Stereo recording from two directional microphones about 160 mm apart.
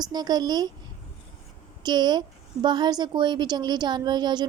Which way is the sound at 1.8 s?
25° right (ahead or behind).